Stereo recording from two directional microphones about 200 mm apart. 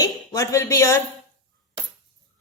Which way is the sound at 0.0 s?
15° left (ahead or behind).